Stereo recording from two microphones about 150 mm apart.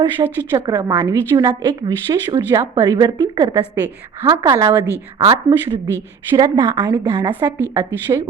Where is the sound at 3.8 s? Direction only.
15° left (ahead or behind).